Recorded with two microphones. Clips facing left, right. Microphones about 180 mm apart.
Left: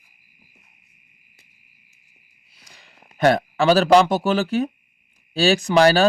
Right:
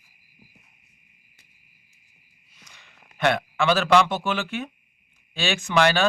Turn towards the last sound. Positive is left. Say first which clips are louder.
# left 5 dB
turn(degrees=35)  # may be behind; listen again after turning